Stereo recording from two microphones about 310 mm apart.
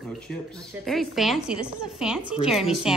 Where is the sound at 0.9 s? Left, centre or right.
Centre.